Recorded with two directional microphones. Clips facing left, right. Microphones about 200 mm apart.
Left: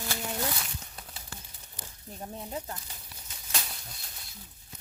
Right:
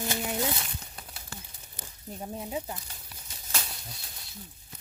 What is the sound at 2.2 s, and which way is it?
Speech, 10° right (ahead or behind).